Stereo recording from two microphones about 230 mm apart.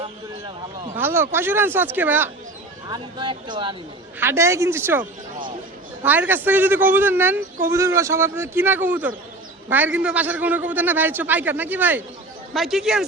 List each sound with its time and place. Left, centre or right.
0.9 s speech: centre
2.9 s speech: centre
6.1 s speech: centre